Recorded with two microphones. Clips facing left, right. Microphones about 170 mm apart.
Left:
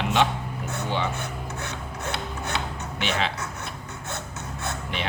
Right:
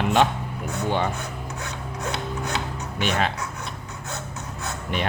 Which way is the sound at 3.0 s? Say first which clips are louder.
Right 3 dB; 45° right (ahead or behind).